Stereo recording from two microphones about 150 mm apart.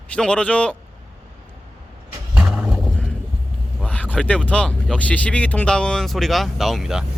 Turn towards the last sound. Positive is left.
turn(degrees=0)  # may be behind; listen again after turning